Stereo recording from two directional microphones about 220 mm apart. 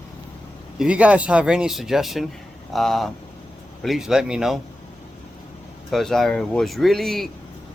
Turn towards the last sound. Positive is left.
turn(degrees=0)  # may be behind; listen again after turning